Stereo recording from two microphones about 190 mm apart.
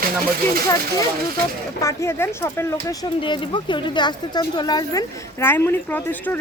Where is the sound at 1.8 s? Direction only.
15° left (ahead or behind).